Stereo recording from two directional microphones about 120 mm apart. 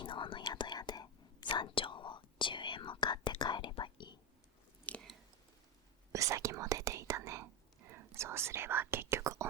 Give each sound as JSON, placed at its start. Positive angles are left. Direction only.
{"t": 0.0, "sound": "whispering", "side_deg": 45}
{"t": 4.9, "sound": "chewing", "side_deg": 15}
{"t": 6.1, "sound": "whispering", "side_deg": -25}